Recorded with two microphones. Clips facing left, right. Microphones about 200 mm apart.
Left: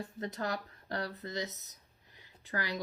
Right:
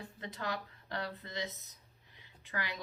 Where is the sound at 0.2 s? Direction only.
40° left (ahead or behind).